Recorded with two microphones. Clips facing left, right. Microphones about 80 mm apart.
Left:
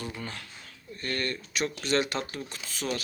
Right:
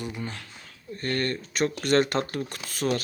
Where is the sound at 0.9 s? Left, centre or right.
Right.